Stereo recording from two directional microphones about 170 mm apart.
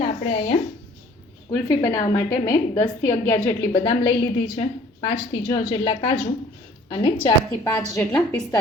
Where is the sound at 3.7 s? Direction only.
35° left (ahead or behind).